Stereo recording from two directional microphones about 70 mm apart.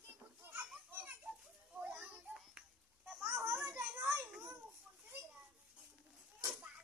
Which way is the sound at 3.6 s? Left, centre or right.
Right.